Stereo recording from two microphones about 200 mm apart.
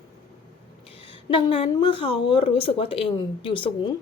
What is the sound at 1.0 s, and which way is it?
A woman's voice, 25° left (ahead or behind).